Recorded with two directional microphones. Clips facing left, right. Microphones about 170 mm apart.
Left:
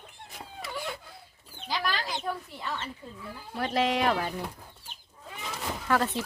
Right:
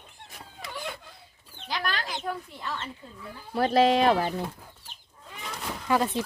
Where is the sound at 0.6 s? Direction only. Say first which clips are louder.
Left 1 dB; 10° left (ahead or behind).